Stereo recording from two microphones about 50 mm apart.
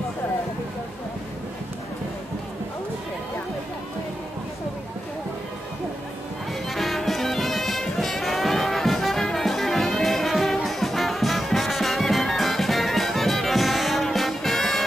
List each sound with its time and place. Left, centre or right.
6.7 s music: centre